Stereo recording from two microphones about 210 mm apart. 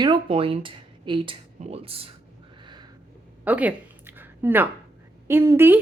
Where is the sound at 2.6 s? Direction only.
20° right (ahead or behind).